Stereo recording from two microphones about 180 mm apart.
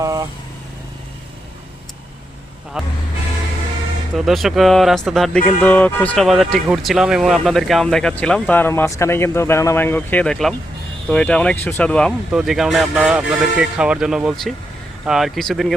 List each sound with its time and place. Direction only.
0.0 s vehicle: 20° right (ahead or behind)
2.8 s speech: 5° right (ahead or behind)
4.1 s speech: centre (ahead or behind)